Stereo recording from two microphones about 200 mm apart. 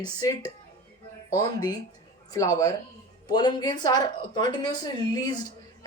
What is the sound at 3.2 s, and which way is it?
Speech, 20° left (ahead or behind).